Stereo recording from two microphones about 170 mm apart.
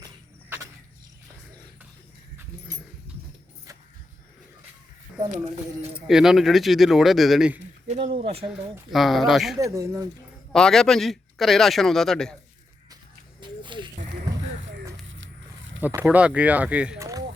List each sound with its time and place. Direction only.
6.1 s a man's voice: centre (ahead or behind)
7.9 s speech: 40° right (ahead or behind)
8.9 s a man's voice: centre (ahead or behind)
9.6 s speech: 20° right (ahead or behind)
10.5 s a man's voice: 5° left (ahead or behind)
13.4 s a sound: 30° right (ahead or behind)
15.0 s a sound: 90° right
15.8 s speech: 10° right (ahead or behind)
17.0 s rowboat: 20° right (ahead or behind)